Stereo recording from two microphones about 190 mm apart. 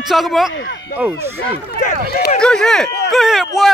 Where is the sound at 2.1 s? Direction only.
50° left (ahead or behind).